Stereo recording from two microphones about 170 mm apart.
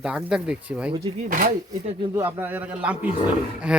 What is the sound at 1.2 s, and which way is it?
Speech, 60° right (ahead or behind).